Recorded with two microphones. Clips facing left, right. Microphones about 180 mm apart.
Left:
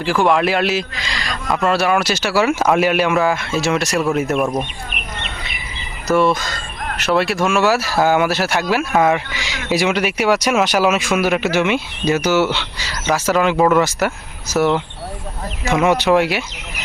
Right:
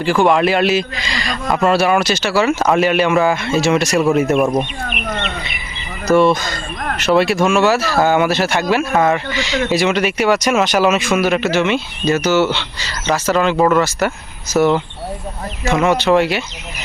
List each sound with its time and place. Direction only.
0.0 s speech: centre (ahead or behind)
6.1 s speech: centre (ahead or behind)